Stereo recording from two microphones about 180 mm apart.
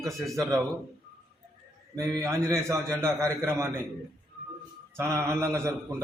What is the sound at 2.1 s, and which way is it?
A man's voice, 15° right (ahead or behind).